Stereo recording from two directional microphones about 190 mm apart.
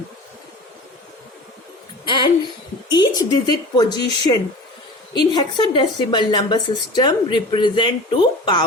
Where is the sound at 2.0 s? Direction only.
25° left (ahead or behind).